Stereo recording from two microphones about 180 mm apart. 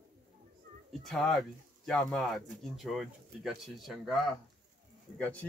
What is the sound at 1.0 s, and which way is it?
Speech, centre (ahead or behind).